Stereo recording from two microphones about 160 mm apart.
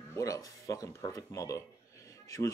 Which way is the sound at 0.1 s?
20° left (ahead or behind).